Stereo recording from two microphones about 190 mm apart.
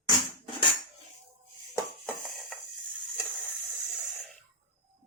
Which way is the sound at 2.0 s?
Centre (ahead or behind).